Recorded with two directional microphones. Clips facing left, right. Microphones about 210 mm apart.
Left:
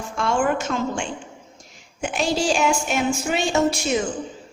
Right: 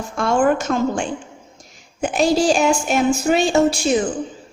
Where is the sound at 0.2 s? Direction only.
40° right (ahead or behind).